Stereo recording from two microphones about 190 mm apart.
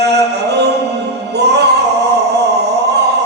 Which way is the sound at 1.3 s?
60° right (ahead or behind).